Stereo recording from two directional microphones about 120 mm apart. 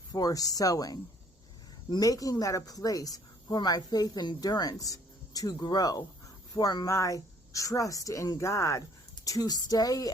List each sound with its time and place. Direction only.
0.1 s a woman's voice: 30° left (ahead or behind)